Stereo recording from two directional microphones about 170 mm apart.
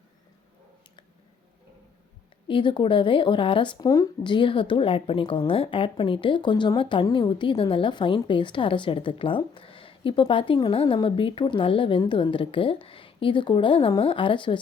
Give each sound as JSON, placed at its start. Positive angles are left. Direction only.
{"t": 2.5, "sound": "speech", "side_deg": 30}